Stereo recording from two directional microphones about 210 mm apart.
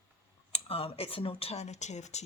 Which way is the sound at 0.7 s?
25° left (ahead or behind).